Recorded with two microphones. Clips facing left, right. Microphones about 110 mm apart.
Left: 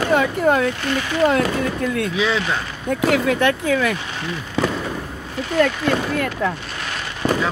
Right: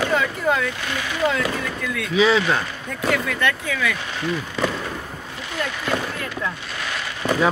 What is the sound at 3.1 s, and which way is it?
Speech, 55° left (ahead or behind).